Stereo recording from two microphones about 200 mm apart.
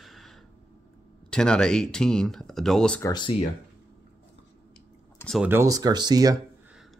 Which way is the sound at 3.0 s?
20° left (ahead or behind).